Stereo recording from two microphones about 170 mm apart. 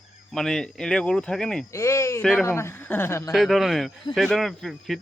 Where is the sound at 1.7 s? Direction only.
15° left (ahead or behind).